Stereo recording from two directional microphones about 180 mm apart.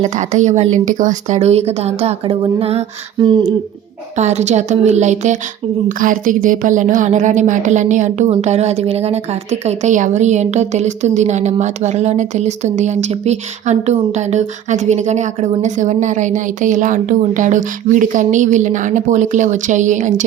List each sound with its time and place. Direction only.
0.0 s a woman's voice: 40° right (ahead or behind)
4.2 s a woman's voice: 40° right (ahead or behind)